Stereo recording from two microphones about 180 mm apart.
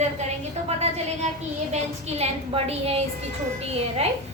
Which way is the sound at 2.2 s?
35° right (ahead or behind).